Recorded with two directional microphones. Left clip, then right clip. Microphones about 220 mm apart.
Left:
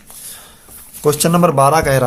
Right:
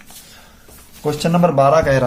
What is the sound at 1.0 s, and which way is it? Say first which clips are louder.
Speech: left 3 dB; 35° left (ahead or behind).